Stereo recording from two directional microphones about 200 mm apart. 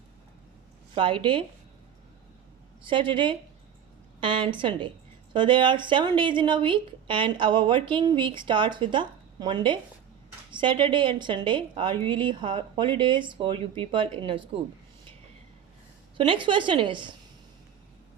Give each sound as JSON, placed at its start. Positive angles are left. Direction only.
{"t": 0.9, "sound": "a woman's voice", "side_deg": -25}
{"t": 2.8, "sound": "a woman's voice", "side_deg": -25}
{"t": 16.1, "sound": "a woman's voice", "side_deg": -25}